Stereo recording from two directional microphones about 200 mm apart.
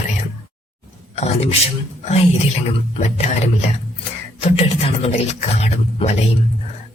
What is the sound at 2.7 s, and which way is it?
Speech, 30° left (ahead or behind).